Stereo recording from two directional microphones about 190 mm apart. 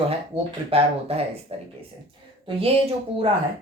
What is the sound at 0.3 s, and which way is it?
Speech, 30° right (ahead or behind).